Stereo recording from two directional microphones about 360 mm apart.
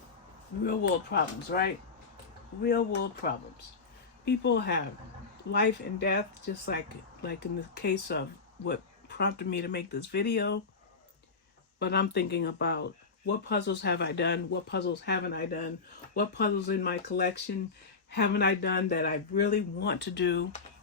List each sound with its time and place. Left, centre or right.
0.6 s speech: left
11.8 s speech: left
18.1 s speech: left